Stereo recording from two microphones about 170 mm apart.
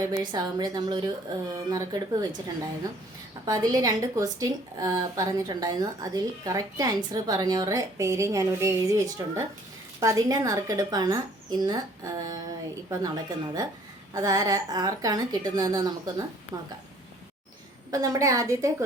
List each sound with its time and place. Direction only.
0.0 s a woman's voice: 20° right (ahead or behind)
3.4 s a woman's voice: 20° right (ahead or behind)
17.9 s a woman's voice: 20° right (ahead or behind)